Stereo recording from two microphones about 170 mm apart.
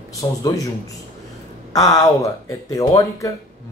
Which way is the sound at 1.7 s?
20° left (ahead or behind).